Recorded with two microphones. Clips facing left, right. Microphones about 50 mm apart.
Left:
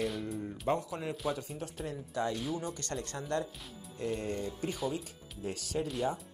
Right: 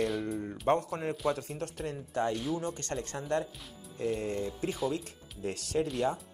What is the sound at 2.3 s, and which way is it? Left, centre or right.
Speech, centre.